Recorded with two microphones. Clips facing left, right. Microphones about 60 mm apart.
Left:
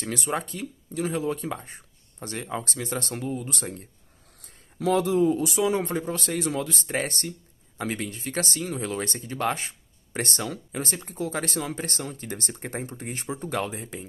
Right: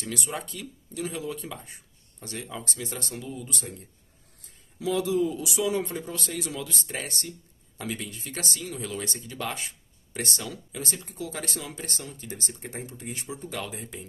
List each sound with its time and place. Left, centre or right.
0.0 s a man's voice: left
13.7 s speech: left